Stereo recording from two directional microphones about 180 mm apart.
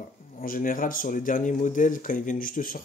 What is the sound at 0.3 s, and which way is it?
Speech, 50° left (ahead or behind).